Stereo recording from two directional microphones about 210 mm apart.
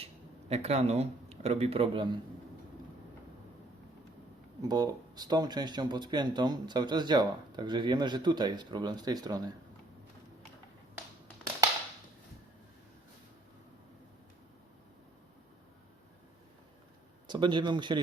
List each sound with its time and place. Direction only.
0.0 s speech: 30° right (ahead or behind)
4.6 s speech: 20° right (ahead or behind)
17.2 s speech: 20° right (ahead or behind)